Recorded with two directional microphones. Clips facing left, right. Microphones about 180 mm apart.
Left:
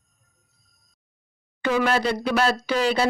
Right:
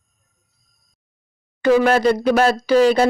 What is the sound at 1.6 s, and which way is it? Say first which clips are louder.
Speech: right 7 dB; 40° right (ahead or behind).